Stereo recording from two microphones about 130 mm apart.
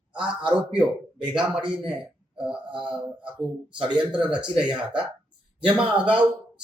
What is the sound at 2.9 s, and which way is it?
Speech, 10° right (ahead or behind).